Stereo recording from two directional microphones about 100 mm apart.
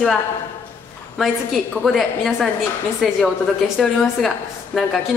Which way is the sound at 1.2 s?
Centre (ahead or behind).